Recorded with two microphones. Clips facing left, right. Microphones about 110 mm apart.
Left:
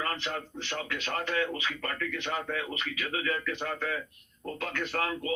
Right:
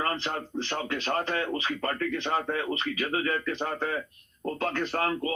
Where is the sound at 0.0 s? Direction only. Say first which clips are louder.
Right 3 dB; 40° right (ahead or behind).